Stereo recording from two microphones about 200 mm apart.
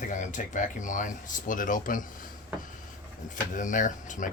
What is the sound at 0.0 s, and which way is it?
Speech, 40° left (ahead or behind).